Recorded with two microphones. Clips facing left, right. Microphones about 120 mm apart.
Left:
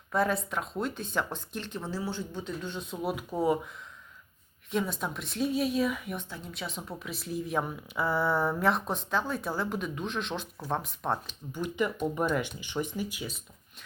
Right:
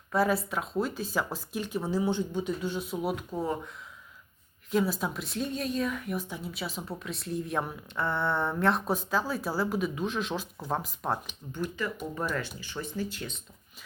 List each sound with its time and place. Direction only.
0.1 s speech: 5° right (ahead or behind)
3.2 s speech: 10° left (ahead or behind)
4.7 s speech: centre (ahead or behind)
6.2 s speech: 15° right (ahead or behind)
6.5 s speech: 5° right (ahead or behind)
11.5 s speech: 15° left (ahead or behind)